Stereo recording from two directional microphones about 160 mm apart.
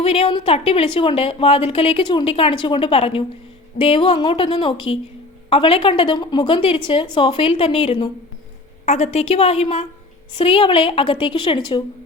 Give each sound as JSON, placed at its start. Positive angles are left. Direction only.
{"t": 0.0, "sound": "a woman's voice", "side_deg": 35}